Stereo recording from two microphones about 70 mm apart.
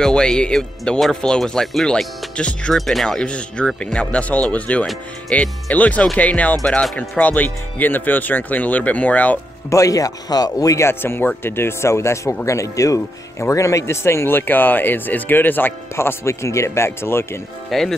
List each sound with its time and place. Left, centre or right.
0.0 s speech: centre
2.7 s speech: centre; by 9.4 s left
9.7 s speech: left
10.9 s speech: left
17.6 s speech: centre